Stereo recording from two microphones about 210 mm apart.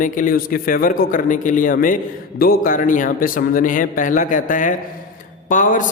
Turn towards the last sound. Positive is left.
turn(degrees=40)  # may be behind; listen again after turning